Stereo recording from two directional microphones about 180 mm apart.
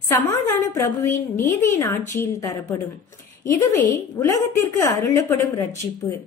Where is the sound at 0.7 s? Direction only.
15° left (ahead or behind).